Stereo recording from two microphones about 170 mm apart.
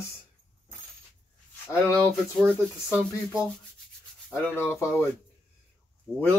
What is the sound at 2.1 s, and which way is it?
Speech, 5° left (ahead or behind).